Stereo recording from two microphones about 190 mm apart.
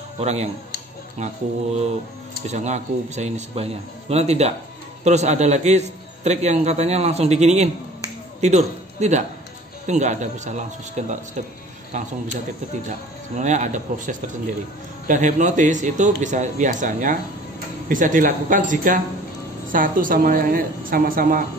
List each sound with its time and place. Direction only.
0.2 s a man's voice: 35° right (ahead or behind)
2.4 s a man's voice: 40° right (ahead or behind)
13.4 s a man's voice: 40° right (ahead or behind)